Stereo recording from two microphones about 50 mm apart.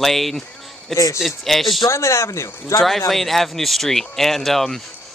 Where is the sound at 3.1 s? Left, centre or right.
Centre.